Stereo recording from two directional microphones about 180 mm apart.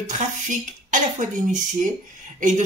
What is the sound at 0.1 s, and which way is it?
Speech, 45° right (ahead or behind).